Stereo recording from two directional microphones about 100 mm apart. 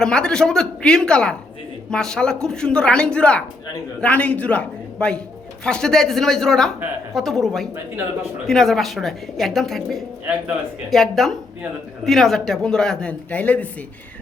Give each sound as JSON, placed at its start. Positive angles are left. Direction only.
{"t": 0.0, "sound": "a woman's voice", "side_deg": 5}